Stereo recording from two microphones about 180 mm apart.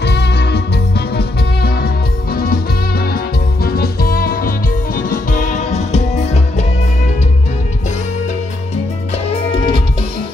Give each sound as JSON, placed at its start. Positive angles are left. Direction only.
{"t": 0.0, "sound": "music", "side_deg": 70}
{"t": 9.3, "sound": "music", "side_deg": 30}